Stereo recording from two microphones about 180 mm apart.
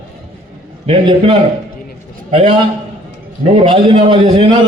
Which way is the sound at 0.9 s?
30° right (ahead or behind).